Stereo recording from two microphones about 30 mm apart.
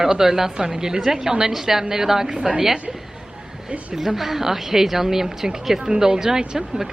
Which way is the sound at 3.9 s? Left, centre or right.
Centre.